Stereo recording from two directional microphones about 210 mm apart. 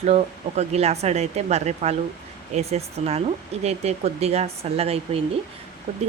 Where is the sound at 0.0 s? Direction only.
30° right (ahead or behind).